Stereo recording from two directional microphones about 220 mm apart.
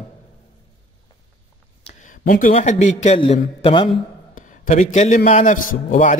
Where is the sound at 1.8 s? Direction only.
35° left (ahead or behind).